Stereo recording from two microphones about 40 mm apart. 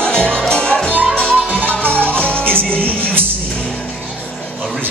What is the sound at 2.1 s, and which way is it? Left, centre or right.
Music, left.